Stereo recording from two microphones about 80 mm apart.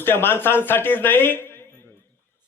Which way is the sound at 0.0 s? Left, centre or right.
Left.